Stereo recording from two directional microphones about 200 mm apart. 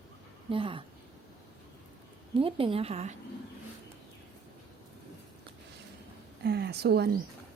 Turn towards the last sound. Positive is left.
turn(degrees=-55)  # may be behind; listen again after turning